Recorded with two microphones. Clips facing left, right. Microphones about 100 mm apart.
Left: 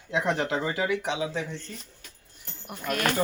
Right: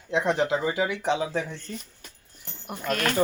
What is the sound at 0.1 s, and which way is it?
Speech, 20° right (ahead or behind).